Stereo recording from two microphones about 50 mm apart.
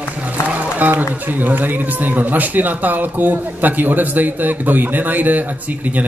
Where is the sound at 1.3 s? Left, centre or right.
Right.